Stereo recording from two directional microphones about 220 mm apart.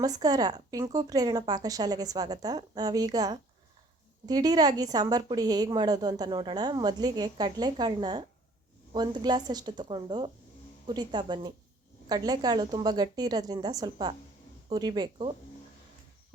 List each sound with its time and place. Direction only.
0.0 s a woman's voice: 15° right (ahead or behind)